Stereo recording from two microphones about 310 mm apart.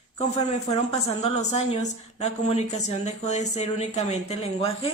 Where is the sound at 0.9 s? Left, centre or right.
Left.